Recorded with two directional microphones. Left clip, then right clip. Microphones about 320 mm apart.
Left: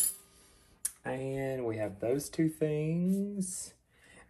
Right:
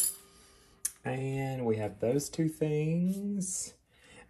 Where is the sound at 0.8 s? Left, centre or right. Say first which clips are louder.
Even; right.